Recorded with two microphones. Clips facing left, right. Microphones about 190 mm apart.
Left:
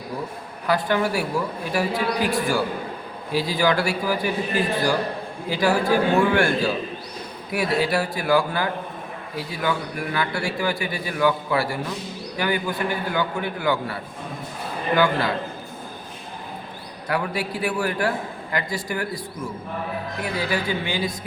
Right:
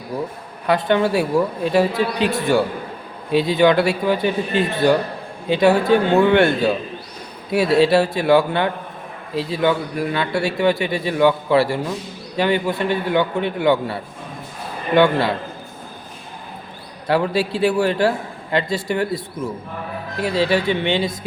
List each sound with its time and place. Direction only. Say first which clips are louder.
0.7 s a man's voice: right 5 dB; 25° right (ahead or behind)
17.1 s a man's voice: right 7 dB; 30° right (ahead or behind)
20.2 s a man's voice: right 8 dB; 25° right (ahead or behind)